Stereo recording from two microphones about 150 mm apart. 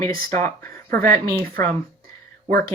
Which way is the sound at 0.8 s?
75° right (ahead or behind).